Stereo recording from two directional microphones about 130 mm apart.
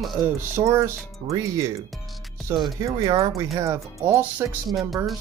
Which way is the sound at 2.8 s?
30° right (ahead or behind).